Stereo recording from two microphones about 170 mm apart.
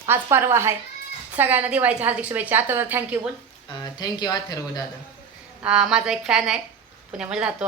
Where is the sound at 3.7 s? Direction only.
25° left (ahead or behind).